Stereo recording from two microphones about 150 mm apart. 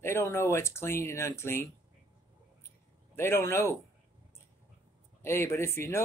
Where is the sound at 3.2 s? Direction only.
15° left (ahead or behind).